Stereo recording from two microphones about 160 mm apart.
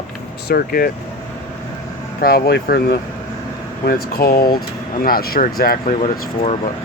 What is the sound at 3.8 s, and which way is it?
Speech, 70° left (ahead or behind).